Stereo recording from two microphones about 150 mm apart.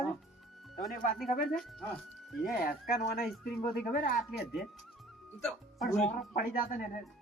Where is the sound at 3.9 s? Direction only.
75° left (ahead or behind).